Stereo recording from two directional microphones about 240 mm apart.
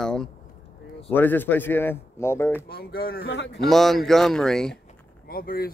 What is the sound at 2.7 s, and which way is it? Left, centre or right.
Speech, left.